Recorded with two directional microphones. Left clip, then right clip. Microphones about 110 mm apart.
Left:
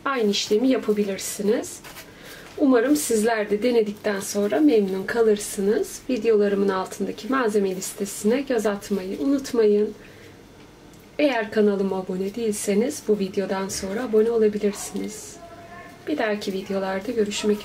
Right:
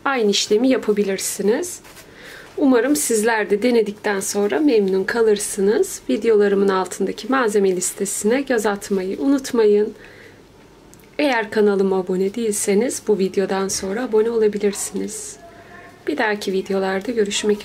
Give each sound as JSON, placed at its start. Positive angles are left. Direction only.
{"t": 0.0, "sound": "a woman's voice", "side_deg": -40}
{"t": 11.1, "sound": "a woman's voice", "side_deg": -45}
{"t": 16.2, "sound": "a woman's voice", "side_deg": -45}